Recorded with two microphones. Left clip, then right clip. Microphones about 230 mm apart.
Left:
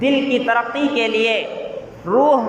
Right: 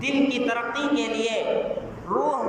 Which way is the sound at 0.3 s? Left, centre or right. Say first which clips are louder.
Left 8 dB; left.